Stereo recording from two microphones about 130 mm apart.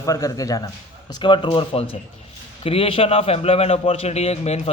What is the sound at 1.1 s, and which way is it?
A man's voice, 40° left (ahead or behind).